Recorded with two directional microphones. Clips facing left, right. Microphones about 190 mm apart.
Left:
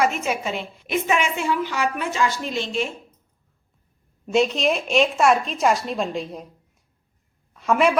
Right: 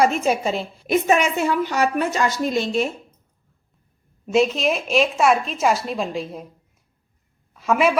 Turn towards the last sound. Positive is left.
turn(degrees=0)  # may be behind; listen again after turning